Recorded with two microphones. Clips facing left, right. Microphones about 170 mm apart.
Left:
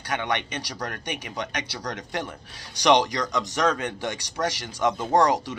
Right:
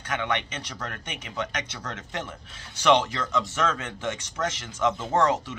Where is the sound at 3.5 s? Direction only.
35° left (ahead or behind).